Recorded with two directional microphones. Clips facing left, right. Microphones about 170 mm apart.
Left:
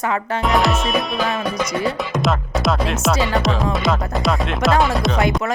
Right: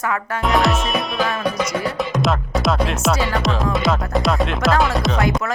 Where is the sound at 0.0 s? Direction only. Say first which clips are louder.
Left 2 dB; 25° left (ahead or behind).